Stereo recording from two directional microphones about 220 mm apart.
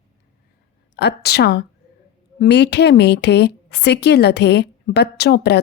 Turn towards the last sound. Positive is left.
turn(degrees=45)  # may be behind; listen again after turning